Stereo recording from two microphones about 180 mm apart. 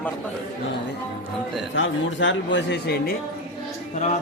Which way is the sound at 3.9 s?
40° left (ahead or behind).